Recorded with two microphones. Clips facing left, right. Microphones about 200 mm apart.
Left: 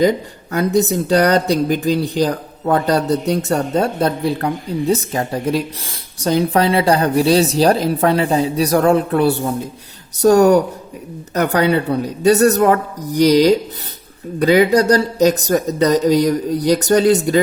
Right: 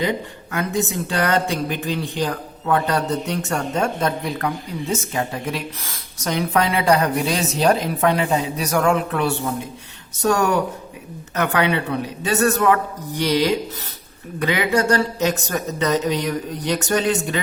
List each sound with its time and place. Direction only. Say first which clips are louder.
0.5 s speech: left 7 dB; 35° left (ahead or behind)